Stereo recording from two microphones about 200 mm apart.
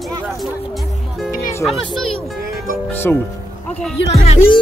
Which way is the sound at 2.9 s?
10° left (ahead or behind).